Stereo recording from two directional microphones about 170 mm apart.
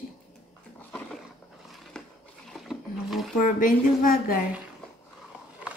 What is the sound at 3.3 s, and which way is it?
A woman's voice, 50° left (ahead or behind).